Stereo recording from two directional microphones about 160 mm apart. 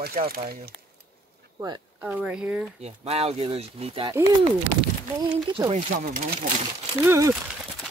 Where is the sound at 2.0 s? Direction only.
5° right (ahead or behind).